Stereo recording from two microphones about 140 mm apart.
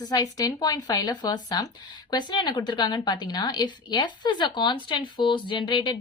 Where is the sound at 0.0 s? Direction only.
30° left (ahead or behind).